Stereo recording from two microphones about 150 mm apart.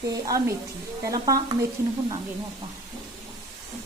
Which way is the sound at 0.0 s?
25° right (ahead or behind).